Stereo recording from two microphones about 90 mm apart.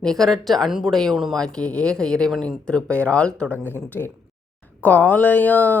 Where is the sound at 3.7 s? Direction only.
20° left (ahead or behind).